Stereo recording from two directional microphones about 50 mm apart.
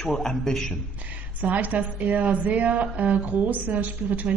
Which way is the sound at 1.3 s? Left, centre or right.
Right.